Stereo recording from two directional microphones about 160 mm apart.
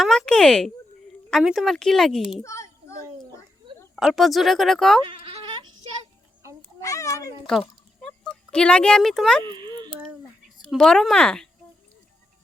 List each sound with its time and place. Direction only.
0.0 s speech: centre (ahead or behind)
2.4 s a sound: 20° left (ahead or behind)
3.9 s speech: centre (ahead or behind)
5.0 s bleat: 35° right (ahead or behind)
6.7 s a child's voice: 20° left (ahead or behind)
8.0 s speech: 5° left (ahead or behind)
9.4 s baby cry: 30° right (ahead or behind)
10.6 s speech: centre (ahead or behind)